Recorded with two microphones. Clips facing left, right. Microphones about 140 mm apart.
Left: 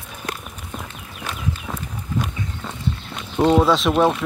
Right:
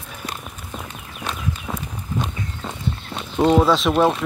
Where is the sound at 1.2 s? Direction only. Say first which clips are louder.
Right 1 dB; 20° right (ahead or behind).